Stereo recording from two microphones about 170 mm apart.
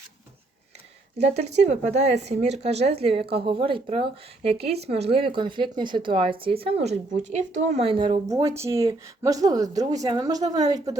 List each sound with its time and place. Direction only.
1.2 s speech: 40° right (ahead or behind); by 10.8 s 20° right (ahead or behind)